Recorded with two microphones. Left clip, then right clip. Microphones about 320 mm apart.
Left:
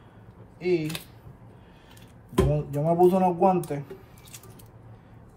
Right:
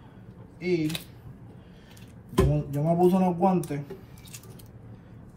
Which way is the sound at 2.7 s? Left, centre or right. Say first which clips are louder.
Left 4 dB; centre.